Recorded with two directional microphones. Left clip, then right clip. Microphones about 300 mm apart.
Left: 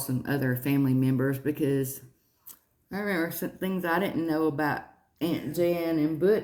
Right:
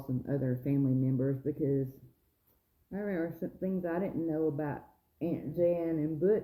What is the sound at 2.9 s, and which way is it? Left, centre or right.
Speech, centre.